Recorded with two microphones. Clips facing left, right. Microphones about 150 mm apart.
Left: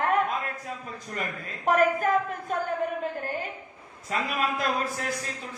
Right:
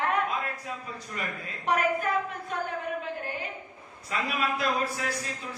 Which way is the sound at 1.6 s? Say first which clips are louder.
Left 4 dB; 45° left (ahead or behind).